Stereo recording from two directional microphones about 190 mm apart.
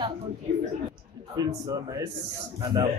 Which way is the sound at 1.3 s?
20° right (ahead or behind).